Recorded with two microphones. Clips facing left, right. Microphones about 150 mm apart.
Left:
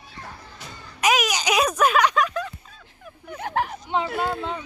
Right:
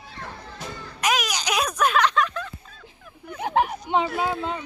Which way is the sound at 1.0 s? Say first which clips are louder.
Left 3 dB; 10° left (ahead or behind).